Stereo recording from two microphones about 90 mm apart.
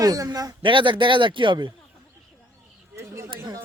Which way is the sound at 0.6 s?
65° right (ahead or behind).